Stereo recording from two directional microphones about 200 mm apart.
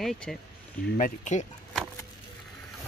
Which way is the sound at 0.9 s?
40° left (ahead or behind).